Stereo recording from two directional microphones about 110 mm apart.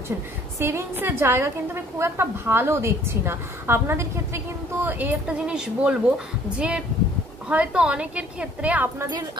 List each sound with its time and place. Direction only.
0.6 s a woman's voice: 25° right (ahead or behind)